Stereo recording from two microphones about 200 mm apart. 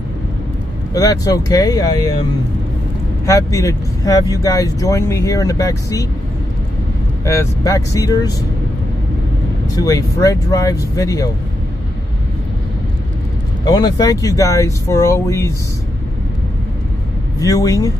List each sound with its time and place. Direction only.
0.9 s speech: 20° left (ahead or behind)
3.3 s speech: 15° left (ahead or behind)
7.2 s speech: 15° left (ahead or behind)
9.8 s speech: 15° left (ahead or behind)
13.7 s speech: 20° left (ahead or behind)
17.4 s speech: 15° left (ahead or behind)